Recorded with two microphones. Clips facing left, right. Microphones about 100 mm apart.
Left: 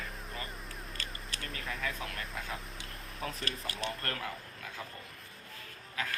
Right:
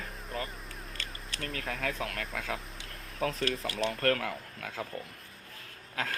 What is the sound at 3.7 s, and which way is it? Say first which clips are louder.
Speech: right 9 dB; 75° right (ahead or behind).